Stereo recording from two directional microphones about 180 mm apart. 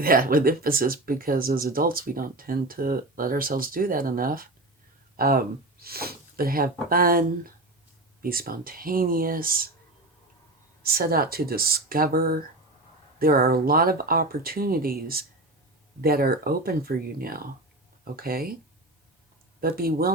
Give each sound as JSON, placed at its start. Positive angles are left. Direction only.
{"t": 0.0, "sound": "speech", "side_deg": -55}
{"t": 10.8, "sound": "speech", "side_deg": -55}
{"t": 19.6, "sound": "speech", "side_deg": -55}